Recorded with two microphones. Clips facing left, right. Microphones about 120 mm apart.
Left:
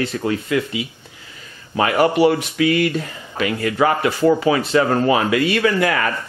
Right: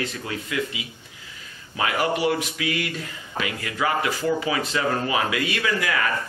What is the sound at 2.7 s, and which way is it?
Speech, 45° left (ahead or behind).